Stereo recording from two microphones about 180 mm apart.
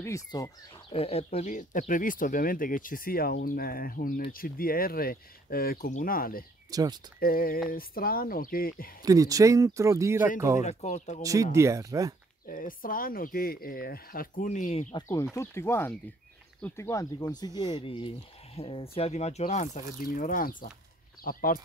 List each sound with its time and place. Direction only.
0.0 s speech: 20° left (ahead or behind)
0.9 s speech: 35° left (ahead or behind); by 6.4 s 50° left (ahead or behind)
6.7 s speech: 20° right (ahead or behind)
7.2 s speech: 55° left (ahead or behind)
9.0 s speech: 20° right (ahead or behind)
10.6 s speech: 40° left (ahead or behind)
11.5 s speech: 15° right (ahead or behind)
12.4 s speech: 50° left (ahead or behind)
15.0 s speech: 15° left (ahead or behind); by 21.5 s 55° left (ahead or behind)